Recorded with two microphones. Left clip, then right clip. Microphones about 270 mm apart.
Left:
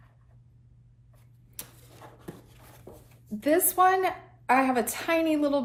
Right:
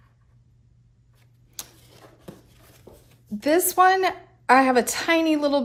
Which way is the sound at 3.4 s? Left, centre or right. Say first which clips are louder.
Right 4 dB; right.